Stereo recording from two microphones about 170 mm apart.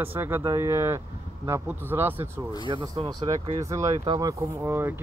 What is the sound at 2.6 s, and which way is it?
Speech, 30° right (ahead or behind).